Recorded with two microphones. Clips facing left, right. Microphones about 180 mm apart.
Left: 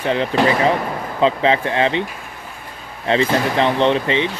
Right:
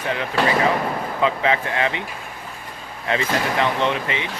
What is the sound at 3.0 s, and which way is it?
Speech, 30° left (ahead or behind).